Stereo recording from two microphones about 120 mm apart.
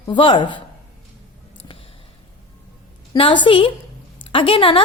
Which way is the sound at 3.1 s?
45° left (ahead or behind).